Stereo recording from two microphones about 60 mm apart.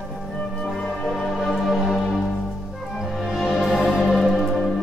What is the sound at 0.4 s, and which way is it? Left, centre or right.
Music, centre.